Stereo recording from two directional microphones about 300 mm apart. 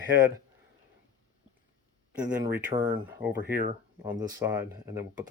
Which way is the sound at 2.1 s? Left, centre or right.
Centre.